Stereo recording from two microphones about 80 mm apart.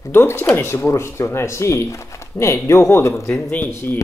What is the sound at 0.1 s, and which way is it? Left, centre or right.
Speech, left.